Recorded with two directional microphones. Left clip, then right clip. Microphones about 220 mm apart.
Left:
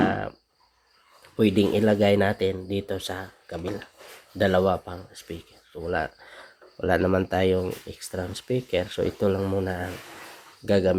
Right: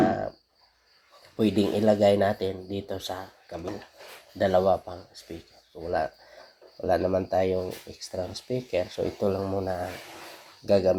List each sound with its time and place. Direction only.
0.0 s cricket: 30° left (ahead or behind)
1.4 s speech: 25° left (ahead or behind)